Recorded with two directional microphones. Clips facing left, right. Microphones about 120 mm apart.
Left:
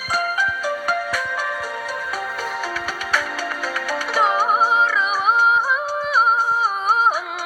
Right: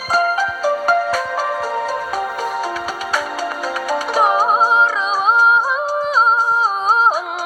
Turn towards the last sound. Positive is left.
turn(degrees=-20)  # may be behind; listen again after turning